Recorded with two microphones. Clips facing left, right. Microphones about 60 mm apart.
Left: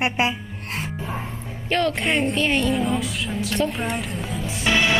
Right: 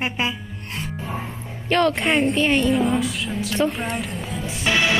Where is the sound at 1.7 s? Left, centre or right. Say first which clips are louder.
Right 3 dB; right.